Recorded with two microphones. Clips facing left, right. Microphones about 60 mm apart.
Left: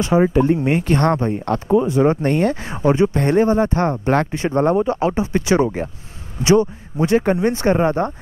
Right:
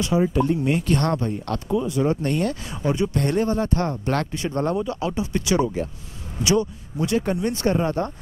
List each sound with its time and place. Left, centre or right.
0.0 s speech: left